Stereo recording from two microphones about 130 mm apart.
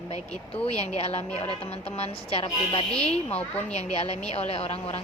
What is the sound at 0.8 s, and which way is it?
A woman's voice, 55° left (ahead or behind).